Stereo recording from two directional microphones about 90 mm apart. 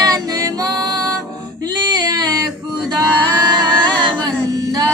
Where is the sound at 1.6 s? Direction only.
50° right (ahead or behind).